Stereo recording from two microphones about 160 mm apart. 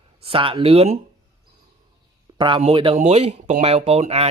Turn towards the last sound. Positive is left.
turn(degrees=-40)  # may be behind; listen again after turning